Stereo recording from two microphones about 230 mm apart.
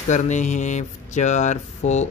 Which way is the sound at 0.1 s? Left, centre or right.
Left.